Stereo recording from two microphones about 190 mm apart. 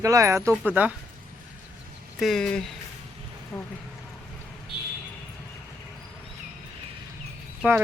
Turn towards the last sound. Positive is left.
turn(degrees=-10)  # may be behind; listen again after turning